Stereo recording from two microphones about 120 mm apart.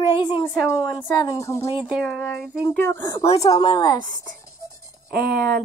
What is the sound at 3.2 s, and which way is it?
Speech, 55° left (ahead or behind).